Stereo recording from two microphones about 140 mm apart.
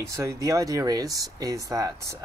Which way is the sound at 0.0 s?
20° right (ahead or behind).